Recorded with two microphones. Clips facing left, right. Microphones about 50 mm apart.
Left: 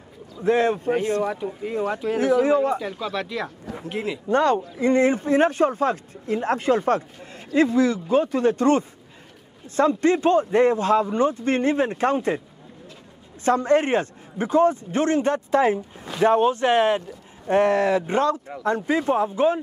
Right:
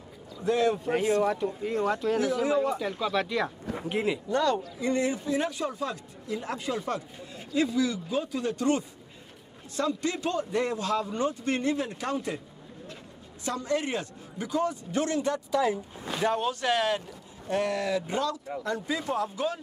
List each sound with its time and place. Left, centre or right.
0.4 s a man's voice: left
1.2 s speech: centre
2.4 s a man's voice: left
2.8 s a man's voice: centre
4.3 s a man's voice: left
13.4 s a man's voice: left